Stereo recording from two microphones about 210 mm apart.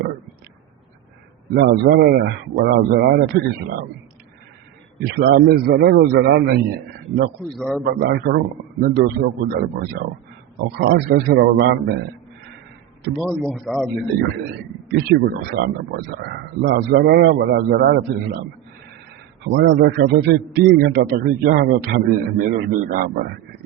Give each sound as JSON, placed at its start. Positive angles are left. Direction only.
{"t": 1.5, "sound": "a man's voice", "side_deg": -50}
{"t": 5.0, "sound": "a man's voice", "side_deg": -50}
{"t": 7.5, "sound": "speech", "side_deg": 0}
{"t": 7.9, "sound": "a man's voice", "side_deg": -50}
{"t": 13.1, "sound": "speech", "side_deg": 0}
{"t": 14.9, "sound": "a man's voice", "side_deg": -50}
{"t": 19.5, "sound": "a man's voice", "side_deg": -55}